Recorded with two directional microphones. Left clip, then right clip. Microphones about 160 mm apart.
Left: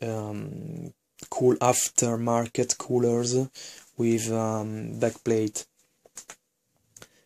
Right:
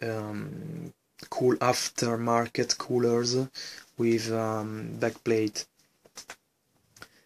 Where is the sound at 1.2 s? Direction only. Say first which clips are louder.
Left 3 dB; 25° left (ahead or behind).